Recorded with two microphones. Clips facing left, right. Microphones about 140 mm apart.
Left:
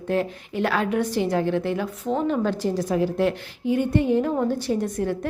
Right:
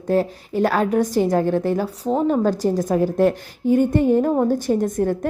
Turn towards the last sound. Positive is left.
turn(degrees=-45)  # may be behind; listen again after turning